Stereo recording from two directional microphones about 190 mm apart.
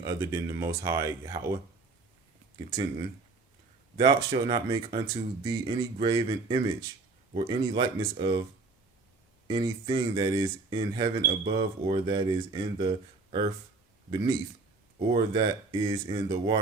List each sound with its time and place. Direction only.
0.0 s speech: 15° right (ahead or behind)
3.9 s speech: 25° right (ahead or behind)
9.5 s speech: 25° right (ahead or behind)
14.9 s speech: 25° right (ahead or behind)